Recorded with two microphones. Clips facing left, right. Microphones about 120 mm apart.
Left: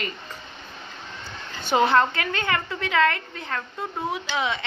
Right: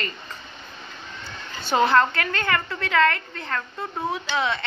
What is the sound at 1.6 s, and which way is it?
A woman's voice, 15° left (ahead or behind).